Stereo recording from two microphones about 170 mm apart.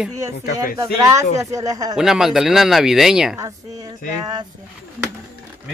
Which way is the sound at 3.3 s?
20° right (ahead or behind).